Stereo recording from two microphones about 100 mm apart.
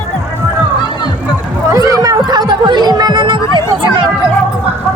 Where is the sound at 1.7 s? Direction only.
35° right (ahead or behind); by 4.1 s 55° right (ahead or behind).